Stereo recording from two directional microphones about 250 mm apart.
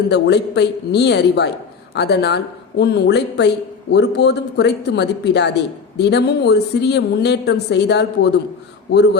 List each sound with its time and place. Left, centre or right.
0.1 s speech: left